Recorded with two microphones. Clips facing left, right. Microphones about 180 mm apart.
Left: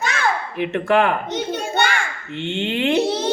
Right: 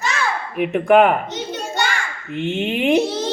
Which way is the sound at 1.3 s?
60° left (ahead or behind).